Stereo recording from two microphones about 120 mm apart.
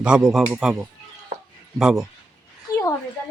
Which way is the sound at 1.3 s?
90° right.